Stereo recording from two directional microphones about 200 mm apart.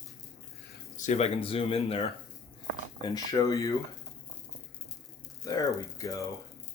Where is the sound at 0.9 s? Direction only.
35° left (ahead or behind); by 3.7 s 20° left (ahead or behind).